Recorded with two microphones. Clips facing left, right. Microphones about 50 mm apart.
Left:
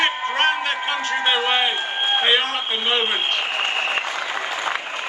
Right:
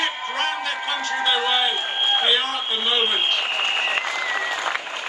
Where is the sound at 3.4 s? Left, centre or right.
Left.